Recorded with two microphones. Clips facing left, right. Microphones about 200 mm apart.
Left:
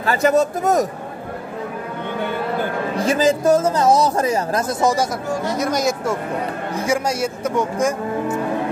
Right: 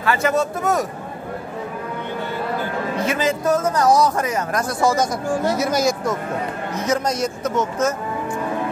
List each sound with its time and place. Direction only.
0.0 s speech: 40° left (ahead or behind)
3.1 s speech: 35° left (ahead or behind)
5.5 s speech: 5° right (ahead or behind)
6.7 s a man's voice: 10° left (ahead or behind)